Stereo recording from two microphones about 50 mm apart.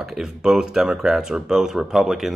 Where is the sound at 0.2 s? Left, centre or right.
Centre.